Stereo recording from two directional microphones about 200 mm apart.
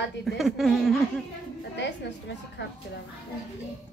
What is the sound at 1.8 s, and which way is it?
Speech, 60° left (ahead or behind).